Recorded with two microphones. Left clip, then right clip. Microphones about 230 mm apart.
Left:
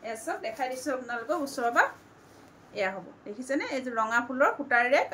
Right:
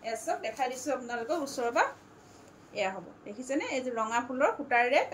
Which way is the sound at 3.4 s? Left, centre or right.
Centre.